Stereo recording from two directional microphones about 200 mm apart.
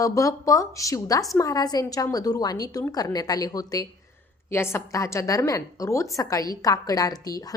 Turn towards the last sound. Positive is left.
turn(degrees=20)  # may be behind; listen again after turning